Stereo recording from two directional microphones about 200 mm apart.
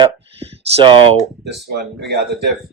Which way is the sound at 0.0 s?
25° right (ahead or behind).